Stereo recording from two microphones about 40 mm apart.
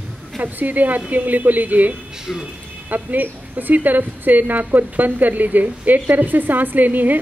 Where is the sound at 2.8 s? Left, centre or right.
Right.